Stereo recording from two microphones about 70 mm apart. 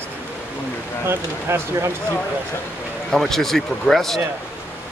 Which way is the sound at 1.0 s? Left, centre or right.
Right.